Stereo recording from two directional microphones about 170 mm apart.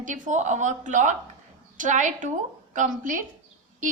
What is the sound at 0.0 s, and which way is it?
A woman's voice, 45° right (ahead or behind).